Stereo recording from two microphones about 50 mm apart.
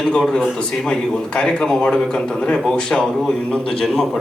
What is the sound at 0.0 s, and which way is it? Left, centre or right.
A man's voice, centre.